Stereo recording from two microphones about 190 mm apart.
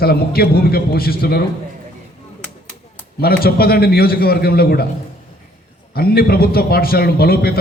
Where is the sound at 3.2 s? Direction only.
55° left (ahead or behind).